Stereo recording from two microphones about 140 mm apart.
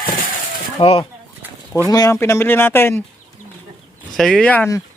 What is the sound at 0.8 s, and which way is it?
Speech, 40° left (ahead or behind).